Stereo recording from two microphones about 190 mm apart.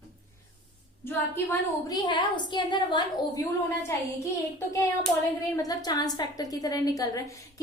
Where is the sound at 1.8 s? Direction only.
25° left (ahead or behind).